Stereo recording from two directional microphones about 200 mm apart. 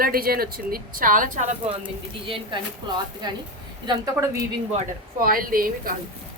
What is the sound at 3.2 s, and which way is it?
A woman's voice, 20° right (ahead or behind).